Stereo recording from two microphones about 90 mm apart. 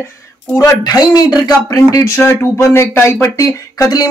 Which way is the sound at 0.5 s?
45° left (ahead or behind).